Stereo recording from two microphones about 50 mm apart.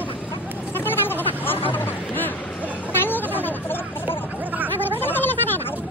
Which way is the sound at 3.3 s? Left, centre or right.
Left.